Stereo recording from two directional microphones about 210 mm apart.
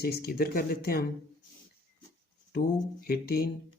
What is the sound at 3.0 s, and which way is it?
Speech, 45° left (ahead or behind).